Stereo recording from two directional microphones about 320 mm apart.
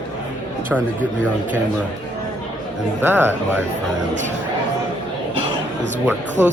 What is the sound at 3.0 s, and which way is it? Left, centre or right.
Speech, centre.